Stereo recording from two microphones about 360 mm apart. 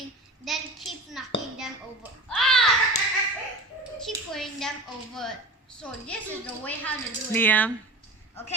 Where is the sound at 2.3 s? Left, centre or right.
Centre.